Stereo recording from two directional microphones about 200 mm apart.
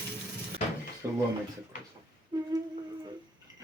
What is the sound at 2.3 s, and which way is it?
Humming, 20° right (ahead or behind).